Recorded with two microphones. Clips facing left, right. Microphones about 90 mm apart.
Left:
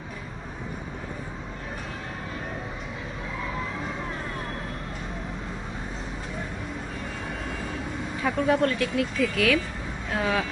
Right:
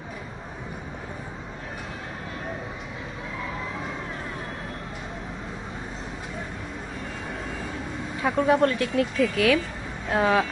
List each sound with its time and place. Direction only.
8.2 s speech: 15° right (ahead or behind)
8.6 s speech: 25° right (ahead or behind)